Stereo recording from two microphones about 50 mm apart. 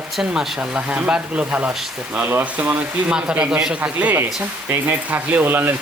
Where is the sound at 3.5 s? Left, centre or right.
Centre.